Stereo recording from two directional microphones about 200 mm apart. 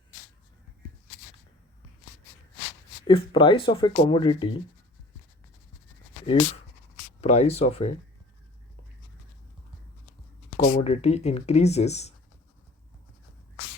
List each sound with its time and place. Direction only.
3.1 s speech: 25° left (ahead or behind)
7.2 s speech: 30° left (ahead or behind)
10.6 s speech: 30° left (ahead or behind)